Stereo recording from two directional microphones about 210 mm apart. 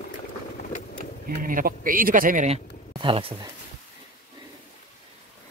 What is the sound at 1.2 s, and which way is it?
A man's voice, 45° right (ahead or behind).